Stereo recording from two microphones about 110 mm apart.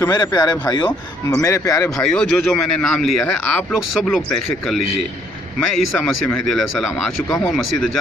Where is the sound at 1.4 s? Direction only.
25° left (ahead or behind).